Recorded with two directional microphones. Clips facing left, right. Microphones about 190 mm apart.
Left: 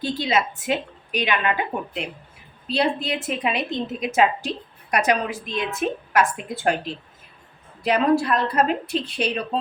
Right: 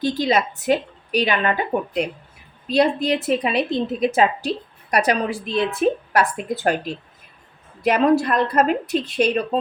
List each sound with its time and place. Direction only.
0.0 s a woman's voice: 40° right (ahead or behind)